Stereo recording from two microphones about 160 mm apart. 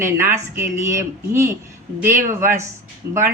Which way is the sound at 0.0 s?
15° right (ahead or behind).